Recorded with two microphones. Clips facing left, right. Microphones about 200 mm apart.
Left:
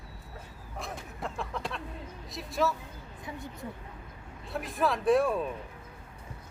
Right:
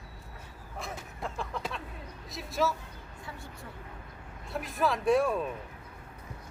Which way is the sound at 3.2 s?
20° left (ahead or behind).